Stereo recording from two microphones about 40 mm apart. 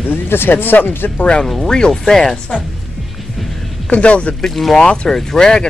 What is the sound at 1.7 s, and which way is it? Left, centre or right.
Speech, centre.